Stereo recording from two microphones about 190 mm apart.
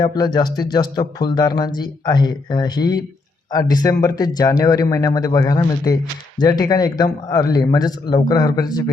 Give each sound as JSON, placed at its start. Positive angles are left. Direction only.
{"t": 0.0, "sound": "speech", "side_deg": 20}